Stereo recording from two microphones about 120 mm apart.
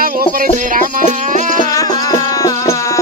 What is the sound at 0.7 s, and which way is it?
Music, 90° right.